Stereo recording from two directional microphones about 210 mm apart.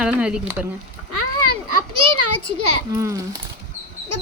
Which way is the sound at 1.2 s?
90° right.